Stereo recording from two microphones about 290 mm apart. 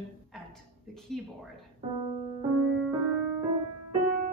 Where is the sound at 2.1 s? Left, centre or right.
Left.